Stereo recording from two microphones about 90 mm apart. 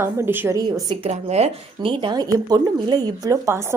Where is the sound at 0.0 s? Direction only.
25° right (ahead or behind).